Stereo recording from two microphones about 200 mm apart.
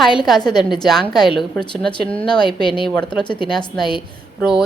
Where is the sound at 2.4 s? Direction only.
25° left (ahead or behind).